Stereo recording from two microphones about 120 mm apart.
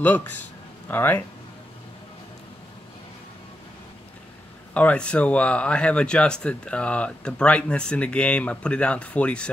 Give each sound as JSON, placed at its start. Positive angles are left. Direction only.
{"t": 0.8, "sound": "speech", "side_deg": 15}
{"t": 4.7, "sound": "speech", "side_deg": 10}